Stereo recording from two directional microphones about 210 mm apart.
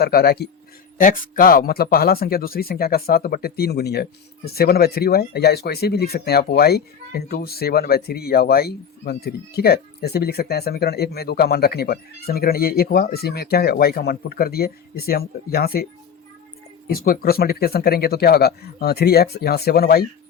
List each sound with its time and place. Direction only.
0.0 s speech: 45° left (ahead or behind)
16.9 s speech: 45° left (ahead or behind)